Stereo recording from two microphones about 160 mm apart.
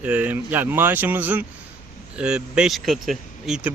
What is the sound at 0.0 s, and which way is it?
Speech, 10° right (ahead or behind).